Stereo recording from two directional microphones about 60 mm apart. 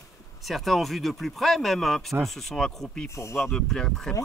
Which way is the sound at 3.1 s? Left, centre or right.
Left.